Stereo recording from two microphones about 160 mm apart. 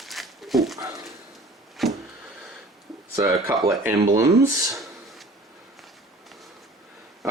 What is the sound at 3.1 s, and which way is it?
Speech, 20° right (ahead or behind).